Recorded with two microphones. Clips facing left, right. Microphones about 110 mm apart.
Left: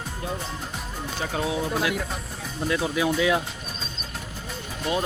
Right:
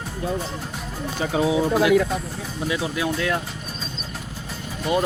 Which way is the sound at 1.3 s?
10° right (ahead or behind).